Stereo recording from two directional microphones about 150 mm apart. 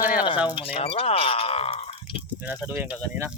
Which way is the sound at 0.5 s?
40° left (ahead or behind).